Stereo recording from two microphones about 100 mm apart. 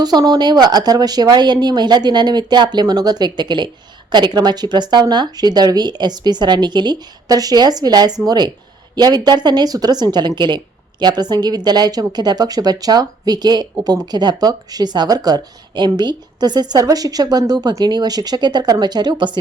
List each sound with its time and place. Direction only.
0.0 s speech: 40° right (ahead or behind)